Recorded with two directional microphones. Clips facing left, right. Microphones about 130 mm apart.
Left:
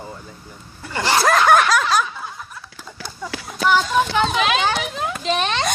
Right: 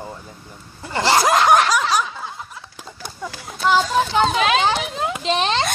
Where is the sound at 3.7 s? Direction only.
30° right (ahead or behind).